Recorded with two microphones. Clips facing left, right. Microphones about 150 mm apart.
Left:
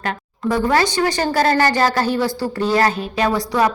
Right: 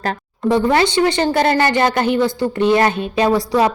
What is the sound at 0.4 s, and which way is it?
Speech, 20° right (ahead or behind).